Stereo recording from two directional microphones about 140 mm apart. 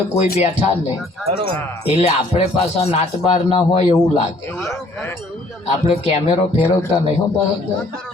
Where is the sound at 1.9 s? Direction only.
50° left (ahead or behind).